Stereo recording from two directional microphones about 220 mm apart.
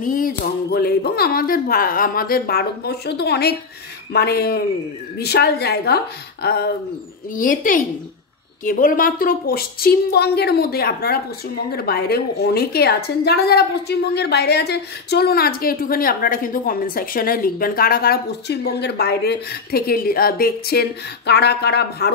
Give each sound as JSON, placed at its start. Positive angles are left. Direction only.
{"t": 0.0, "sound": "a woman's voice", "side_deg": 40}